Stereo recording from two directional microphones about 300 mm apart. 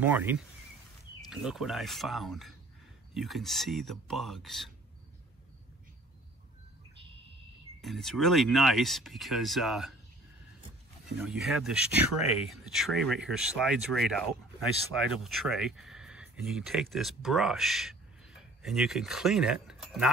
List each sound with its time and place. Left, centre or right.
0.0 s speech: centre
7.8 s speech: centre
11.1 s speech: centre
12.2 s speech: left
12.4 s speech: centre
15.2 s speech: centre